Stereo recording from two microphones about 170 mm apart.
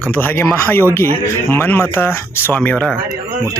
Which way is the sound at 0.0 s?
10° left (ahead or behind).